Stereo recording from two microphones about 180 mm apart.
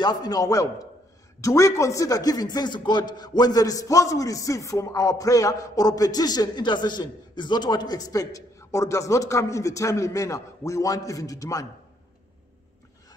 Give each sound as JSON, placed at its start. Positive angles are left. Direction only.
{"t": 0.0, "sound": "a man's voice", "side_deg": 20}